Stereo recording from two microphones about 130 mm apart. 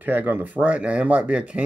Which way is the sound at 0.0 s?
15° right (ahead or behind).